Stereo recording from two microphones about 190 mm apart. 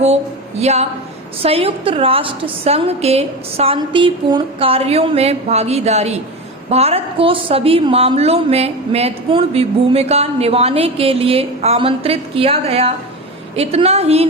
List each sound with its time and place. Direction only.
0.6 s a woman's voice: 35° right (ahead or behind)